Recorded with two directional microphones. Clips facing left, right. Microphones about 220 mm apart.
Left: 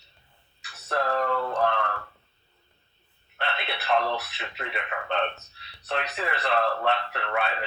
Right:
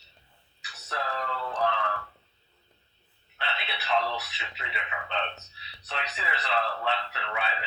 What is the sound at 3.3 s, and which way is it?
Speech, 55° left (ahead or behind).